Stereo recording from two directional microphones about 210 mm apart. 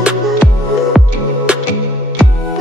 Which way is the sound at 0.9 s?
5° right (ahead or behind).